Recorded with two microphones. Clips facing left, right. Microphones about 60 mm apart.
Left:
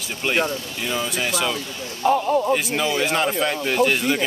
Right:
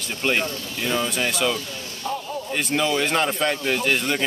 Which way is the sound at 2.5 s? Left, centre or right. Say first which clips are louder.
Left 2 dB; centre.